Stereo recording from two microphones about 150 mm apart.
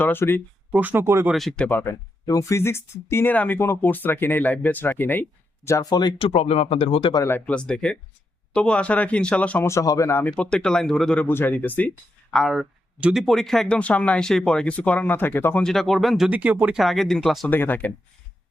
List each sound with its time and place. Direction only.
0.0 s speech: 15° left (ahead or behind)
0.7 s speech: 10° right (ahead or behind)
1.3 s speech: centre (ahead or behind)
5.6 s speech: 25° left (ahead or behind); by 7.1 s 40° left (ahead or behind)
7.1 s speech: 20° left (ahead or behind)
15.6 s speech: centre (ahead or behind)
17.5 s speech: 10° left (ahead or behind)